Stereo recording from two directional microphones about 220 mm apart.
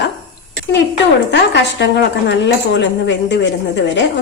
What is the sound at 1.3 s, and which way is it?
Speech, 55° left (ahead or behind).